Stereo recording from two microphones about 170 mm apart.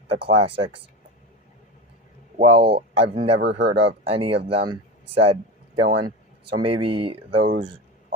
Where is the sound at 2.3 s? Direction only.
35° right (ahead or behind).